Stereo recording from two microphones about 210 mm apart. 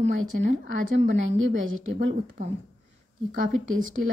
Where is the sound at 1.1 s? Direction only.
70° right (ahead or behind).